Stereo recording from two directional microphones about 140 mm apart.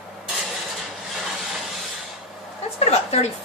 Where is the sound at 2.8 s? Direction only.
50° left (ahead or behind).